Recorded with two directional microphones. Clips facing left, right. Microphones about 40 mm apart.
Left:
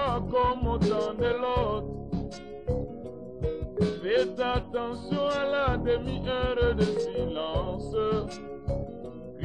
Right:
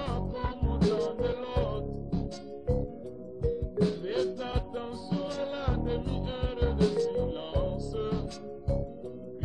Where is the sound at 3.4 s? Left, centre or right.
Left.